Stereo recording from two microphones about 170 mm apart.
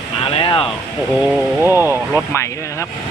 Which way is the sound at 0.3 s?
30° left (ahead or behind).